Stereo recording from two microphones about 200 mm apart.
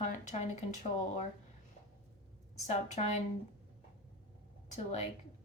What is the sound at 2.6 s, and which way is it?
Speech, 35° left (ahead or behind).